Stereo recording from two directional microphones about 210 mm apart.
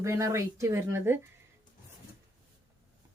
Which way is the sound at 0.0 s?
15° right (ahead or behind).